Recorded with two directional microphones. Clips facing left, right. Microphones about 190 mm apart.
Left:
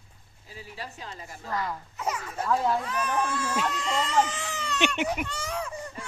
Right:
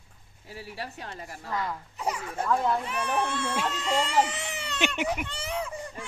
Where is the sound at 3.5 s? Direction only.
5° right (ahead or behind).